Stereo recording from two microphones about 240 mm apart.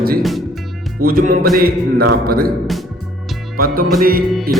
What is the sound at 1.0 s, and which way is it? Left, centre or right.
Speech, right.